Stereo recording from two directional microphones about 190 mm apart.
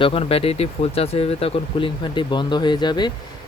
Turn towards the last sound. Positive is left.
turn(degrees=25)  # may be behind; listen again after turning